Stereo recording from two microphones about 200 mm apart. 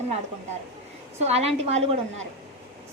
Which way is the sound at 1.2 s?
30° right (ahead or behind).